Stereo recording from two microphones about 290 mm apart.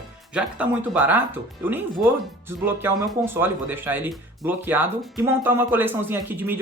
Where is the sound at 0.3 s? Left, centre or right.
Centre.